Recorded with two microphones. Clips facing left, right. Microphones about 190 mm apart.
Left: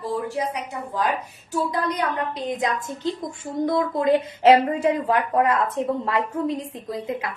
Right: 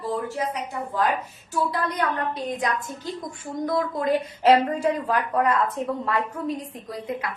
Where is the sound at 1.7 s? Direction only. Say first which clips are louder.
Left 1 dB; 15° left (ahead or behind).